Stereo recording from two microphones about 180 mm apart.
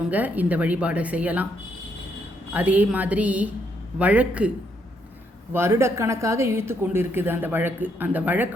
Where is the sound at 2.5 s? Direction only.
10° right (ahead or behind).